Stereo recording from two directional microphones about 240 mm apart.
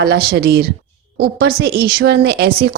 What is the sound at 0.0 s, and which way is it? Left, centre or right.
A woman's voice, right.